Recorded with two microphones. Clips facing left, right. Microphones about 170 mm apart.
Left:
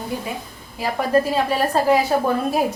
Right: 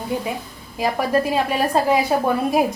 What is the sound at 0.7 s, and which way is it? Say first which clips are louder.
A woman's voice: even; 15° right (ahead or behind).